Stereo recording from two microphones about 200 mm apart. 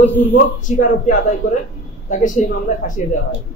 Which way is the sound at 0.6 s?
40° left (ahead or behind).